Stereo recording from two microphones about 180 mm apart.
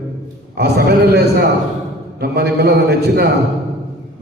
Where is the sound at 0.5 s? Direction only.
65° right (ahead or behind).